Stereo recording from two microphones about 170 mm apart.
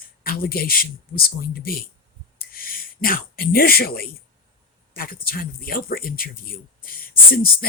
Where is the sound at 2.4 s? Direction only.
60° left (ahead or behind).